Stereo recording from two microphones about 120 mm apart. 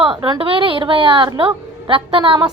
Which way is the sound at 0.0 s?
45° right (ahead or behind).